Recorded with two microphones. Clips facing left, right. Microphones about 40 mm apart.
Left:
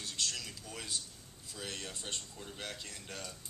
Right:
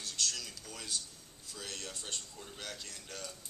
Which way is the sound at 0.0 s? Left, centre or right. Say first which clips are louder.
Even; left.